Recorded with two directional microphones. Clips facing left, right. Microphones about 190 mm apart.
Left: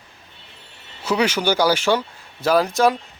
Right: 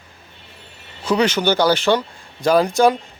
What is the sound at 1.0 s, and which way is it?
A man's voice, 10° left (ahead or behind).